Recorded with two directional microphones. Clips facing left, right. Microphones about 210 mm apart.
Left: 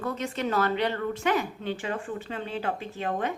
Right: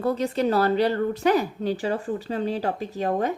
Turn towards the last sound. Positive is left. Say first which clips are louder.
# right 5 dB
turn(degrees=-40)  # may be behind; listen again after turning